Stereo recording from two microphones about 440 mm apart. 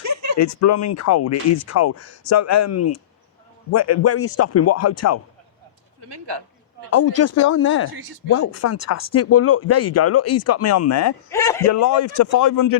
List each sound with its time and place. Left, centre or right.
0.0 s a sound: right
0.6 s speech: left
6.1 s speech: right
6.9 s speech: left
11.3 s a man's voice: centre
11.7 s speech: left